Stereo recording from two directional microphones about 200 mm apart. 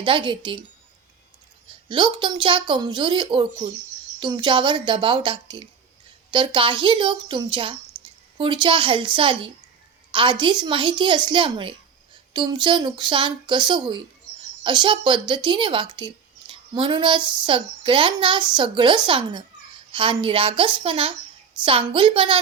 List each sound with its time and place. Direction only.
0.0 s speech: 25° right (ahead or behind)
1.9 s speech: 25° right (ahead or behind)